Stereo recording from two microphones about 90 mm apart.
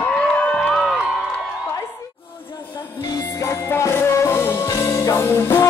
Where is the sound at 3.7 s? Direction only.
30° left (ahead or behind).